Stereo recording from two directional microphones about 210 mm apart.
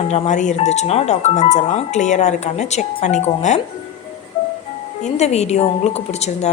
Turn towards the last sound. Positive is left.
turn(degrees=30)  # may be behind; listen again after turning